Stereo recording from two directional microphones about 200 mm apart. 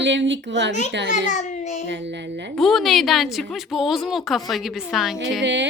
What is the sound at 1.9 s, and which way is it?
Speech, 60° right (ahead or behind).